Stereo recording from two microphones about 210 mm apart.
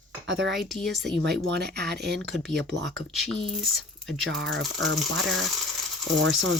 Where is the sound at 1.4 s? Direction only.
50° right (ahead or behind).